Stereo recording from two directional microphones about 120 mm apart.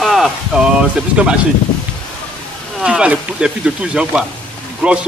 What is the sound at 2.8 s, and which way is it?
A man's voice, 10° right (ahead or behind).